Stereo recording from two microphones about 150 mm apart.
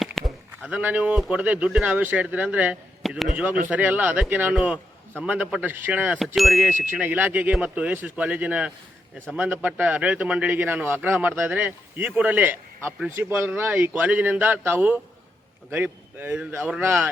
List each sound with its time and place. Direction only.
0.0 s a sound: centre (ahead or behind)
0.7 s a man's voice: 10° right (ahead or behind)
6.1 s speech: centre (ahead or behind)
6.9 s speech: 10° right (ahead or behind)